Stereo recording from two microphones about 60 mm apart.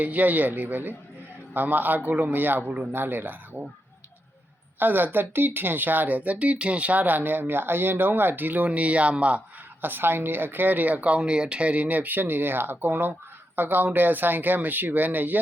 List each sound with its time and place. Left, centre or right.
0.0 s speech: right
2.9 s speech: right
4.8 s speech: right
9.8 s speech: right